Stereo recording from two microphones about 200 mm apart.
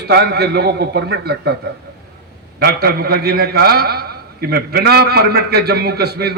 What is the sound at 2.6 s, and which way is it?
A man's voice, 50° right (ahead or behind).